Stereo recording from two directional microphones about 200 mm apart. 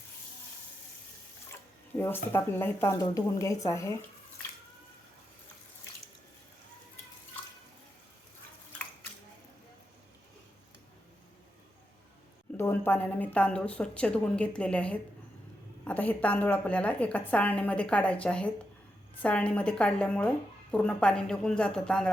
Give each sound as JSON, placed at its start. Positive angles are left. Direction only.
{"t": 1.5, "sound": "speech", "side_deg": 10}
{"t": 12.5, "sound": "a woman's voice", "side_deg": 10}